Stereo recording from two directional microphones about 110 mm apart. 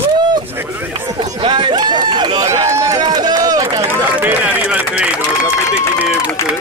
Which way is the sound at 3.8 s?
15° right (ahead or behind).